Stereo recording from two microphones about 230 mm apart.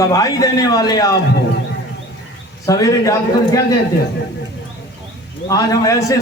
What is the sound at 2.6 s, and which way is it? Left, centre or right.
A man's voice, centre.